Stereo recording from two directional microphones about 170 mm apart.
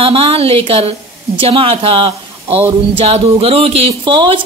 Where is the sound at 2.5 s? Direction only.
10° right (ahead or behind).